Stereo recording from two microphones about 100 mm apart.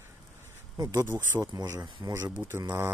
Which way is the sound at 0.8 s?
40° right (ahead or behind).